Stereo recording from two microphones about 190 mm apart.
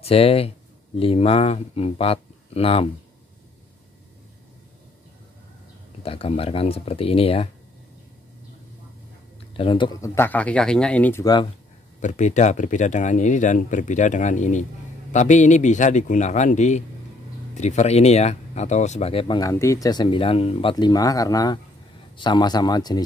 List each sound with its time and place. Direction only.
0.0 s speech: 30° left (ahead or behind)
6.0 s speech: 30° left (ahead or behind)
9.6 s speech: 25° left (ahead or behind); by 11.2 s 10° left (ahead or behind)
12.0 s speech: 40° left (ahead or behind)
20.7 s speech: 20° left (ahead or behind)